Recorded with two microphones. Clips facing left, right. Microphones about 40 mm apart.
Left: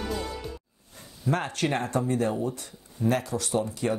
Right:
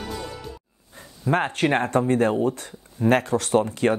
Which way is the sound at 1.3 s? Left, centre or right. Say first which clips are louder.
Right 6 dB; right.